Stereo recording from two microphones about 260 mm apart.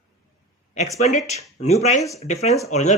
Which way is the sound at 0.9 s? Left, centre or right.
Left.